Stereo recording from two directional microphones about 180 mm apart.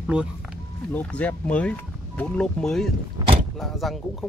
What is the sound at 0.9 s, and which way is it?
Speech, 10° left (ahead or behind).